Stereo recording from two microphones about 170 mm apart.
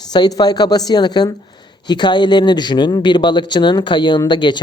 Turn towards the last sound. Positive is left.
turn(degrees=25)  # may be behind; listen again after turning